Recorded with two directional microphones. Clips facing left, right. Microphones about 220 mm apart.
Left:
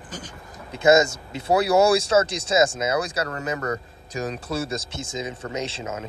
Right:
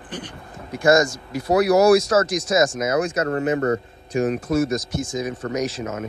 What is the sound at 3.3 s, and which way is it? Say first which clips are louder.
Speech: right 7 dB; 40° right (ahead or behind).